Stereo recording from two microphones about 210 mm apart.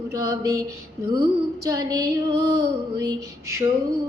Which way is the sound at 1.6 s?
15° right (ahead or behind).